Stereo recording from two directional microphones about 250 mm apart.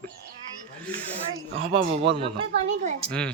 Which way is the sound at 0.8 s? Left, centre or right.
Centre.